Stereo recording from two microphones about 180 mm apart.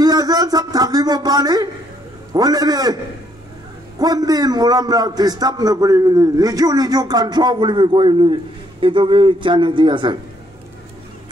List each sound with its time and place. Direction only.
0.0 s a sound: 20° right (ahead or behind)
2.3 s a man's voice: 20° right (ahead or behind)
4.0 s a man's voice: 20° right (ahead or behind)